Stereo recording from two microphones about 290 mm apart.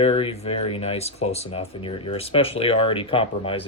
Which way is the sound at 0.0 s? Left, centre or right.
Centre.